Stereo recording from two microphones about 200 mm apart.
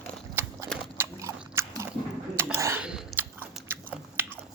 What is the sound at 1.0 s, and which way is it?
Biting, 15° right (ahead or behind).